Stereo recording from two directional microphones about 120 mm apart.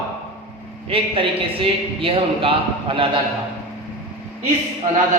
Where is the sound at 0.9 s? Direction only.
50° right (ahead or behind).